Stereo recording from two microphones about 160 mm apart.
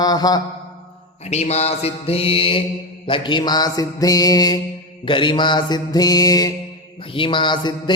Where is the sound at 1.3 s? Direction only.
40° left (ahead or behind).